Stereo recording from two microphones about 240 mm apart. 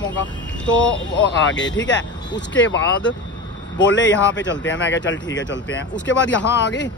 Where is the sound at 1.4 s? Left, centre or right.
Left.